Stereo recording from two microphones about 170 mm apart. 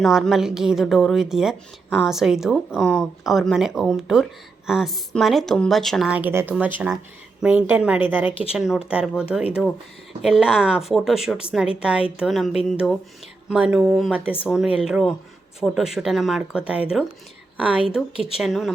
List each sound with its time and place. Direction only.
0.0 s a woman's voice: centre (ahead or behind)
18.1 s speech: 35° left (ahead or behind)
18.3 s speech: centre (ahead or behind)